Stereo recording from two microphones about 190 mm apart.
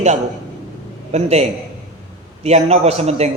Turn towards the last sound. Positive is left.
turn(degrees=-35)  # may be behind; listen again after turning